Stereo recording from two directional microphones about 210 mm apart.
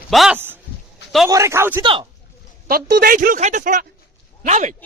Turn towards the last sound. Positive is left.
turn(degrees=-35)  # may be behind; listen again after turning